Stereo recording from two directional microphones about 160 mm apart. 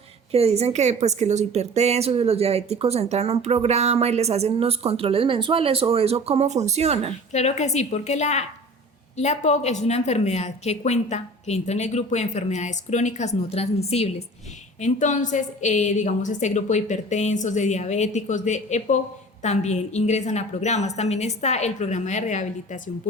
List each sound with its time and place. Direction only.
0.3 s a woman's voice: 40° right (ahead or behind)
7.3 s a woman's voice: 45° left (ahead or behind)